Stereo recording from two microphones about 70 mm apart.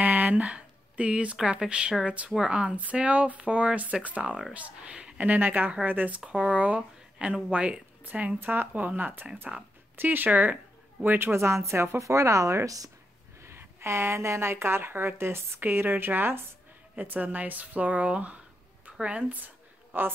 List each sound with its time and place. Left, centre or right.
0.0 s speech: right
11.3 s a woman's voice: right
13.4 s a woman's voice: right
18.9 s a sound: centre